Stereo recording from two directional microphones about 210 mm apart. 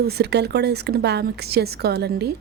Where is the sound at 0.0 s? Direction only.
50° right (ahead or behind).